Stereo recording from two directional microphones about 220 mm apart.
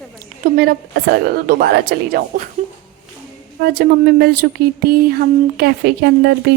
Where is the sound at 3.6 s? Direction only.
45° right (ahead or behind).